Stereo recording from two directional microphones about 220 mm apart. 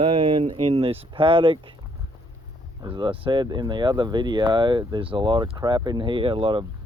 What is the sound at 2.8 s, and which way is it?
Speech, 20° right (ahead or behind).